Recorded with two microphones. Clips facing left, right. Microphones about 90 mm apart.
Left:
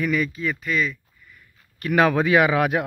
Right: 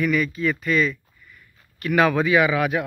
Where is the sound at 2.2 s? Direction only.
55° left (ahead or behind).